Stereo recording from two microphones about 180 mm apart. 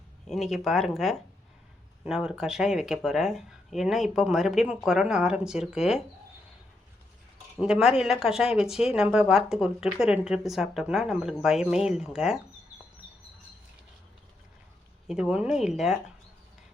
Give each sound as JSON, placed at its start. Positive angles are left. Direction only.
{"t": 0.3, "sound": "speech", "side_deg": 0}
{"t": 7.6, "sound": "speech", "side_deg": -5}
{"t": 15.0, "sound": "speech", "side_deg": -5}